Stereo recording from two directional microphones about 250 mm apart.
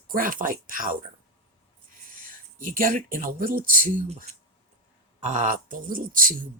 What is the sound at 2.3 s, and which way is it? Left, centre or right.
Speech, right.